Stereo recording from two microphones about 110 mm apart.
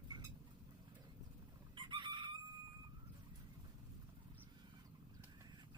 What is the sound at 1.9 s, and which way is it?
Chicken, 45° right (ahead or behind).